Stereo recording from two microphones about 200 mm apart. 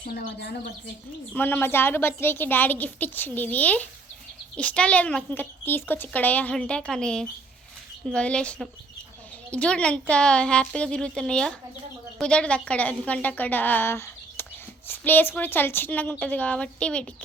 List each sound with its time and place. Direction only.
0.0 s speech: 45° left (ahead or behind)
1.4 s a woman's voice: 10° left (ahead or behind)